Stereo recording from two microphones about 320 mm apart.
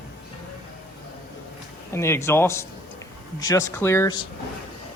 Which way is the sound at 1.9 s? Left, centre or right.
Centre.